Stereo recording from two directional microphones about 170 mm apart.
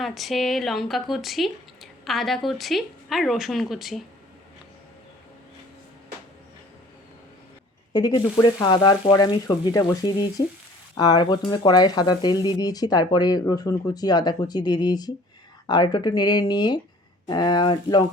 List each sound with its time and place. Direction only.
0.0 s a woman's voice: centre (ahead or behind)
7.9 s sizzle: 25° left (ahead or behind)